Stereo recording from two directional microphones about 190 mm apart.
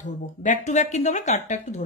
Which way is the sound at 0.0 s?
40° left (ahead or behind).